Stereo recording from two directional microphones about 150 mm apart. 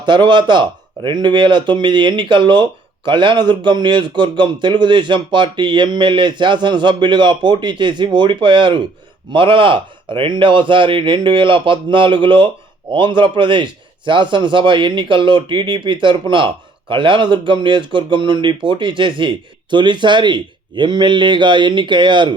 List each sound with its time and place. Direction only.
0.0 s a man's voice: 30° right (ahead or behind)